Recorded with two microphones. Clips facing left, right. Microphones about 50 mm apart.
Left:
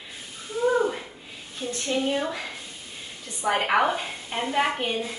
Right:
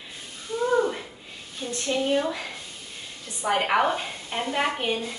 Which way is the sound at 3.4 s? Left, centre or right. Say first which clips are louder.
Even; centre.